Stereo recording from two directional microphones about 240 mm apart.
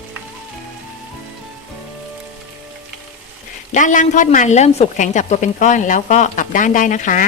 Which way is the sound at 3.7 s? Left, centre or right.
Left.